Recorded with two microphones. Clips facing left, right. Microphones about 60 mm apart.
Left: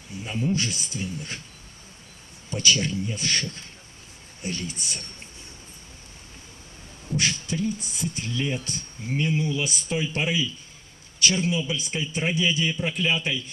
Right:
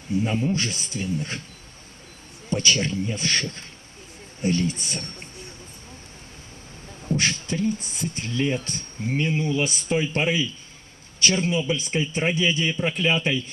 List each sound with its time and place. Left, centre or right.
0.2 s speech: right
2.5 s speech: right
7.1 s speech: right